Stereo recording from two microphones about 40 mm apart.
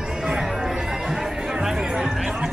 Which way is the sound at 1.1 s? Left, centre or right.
Centre.